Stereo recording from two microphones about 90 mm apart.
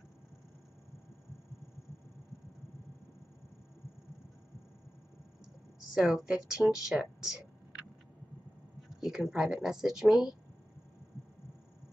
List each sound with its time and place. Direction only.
5.9 s speech: 5° right (ahead or behind)
9.0 s speech: 5° right (ahead or behind)